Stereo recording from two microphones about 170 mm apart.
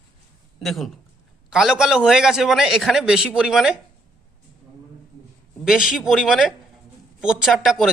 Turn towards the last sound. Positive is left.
turn(degrees=0)  # may be behind; listen again after turning